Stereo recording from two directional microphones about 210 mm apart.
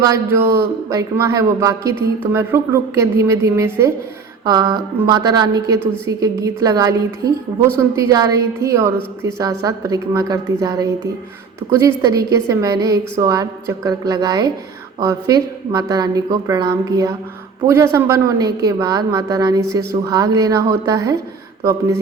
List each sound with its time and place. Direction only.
0.0 s speech: 15° right (ahead or behind)